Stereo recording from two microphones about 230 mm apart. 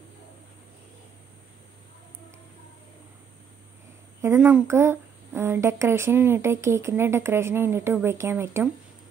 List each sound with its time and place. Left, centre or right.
4.2 s speech: centre